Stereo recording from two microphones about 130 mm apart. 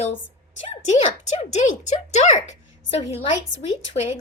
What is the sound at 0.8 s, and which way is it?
A woman's voice, 65° left (ahead or behind).